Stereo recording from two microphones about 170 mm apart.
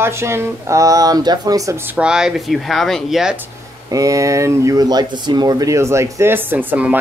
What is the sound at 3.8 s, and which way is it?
Speech, 20° right (ahead or behind).